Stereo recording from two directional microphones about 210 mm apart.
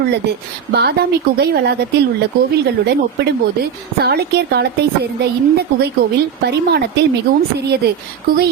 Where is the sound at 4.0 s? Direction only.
50° right (ahead or behind).